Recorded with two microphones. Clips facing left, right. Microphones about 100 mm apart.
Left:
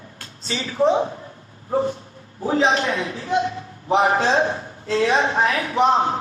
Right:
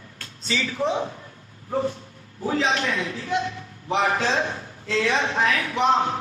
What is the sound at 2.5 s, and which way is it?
A woman's voice, 30° left (ahead or behind).